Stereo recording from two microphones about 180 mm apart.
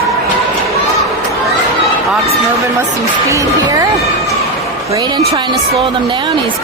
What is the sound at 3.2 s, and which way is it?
Speech, 20° right (ahead or behind).